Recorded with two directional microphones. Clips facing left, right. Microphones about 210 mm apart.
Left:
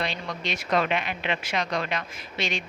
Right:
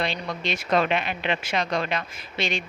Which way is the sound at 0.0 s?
30° right (ahead or behind).